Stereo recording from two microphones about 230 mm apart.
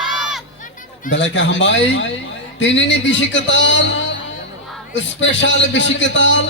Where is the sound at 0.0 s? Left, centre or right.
Centre.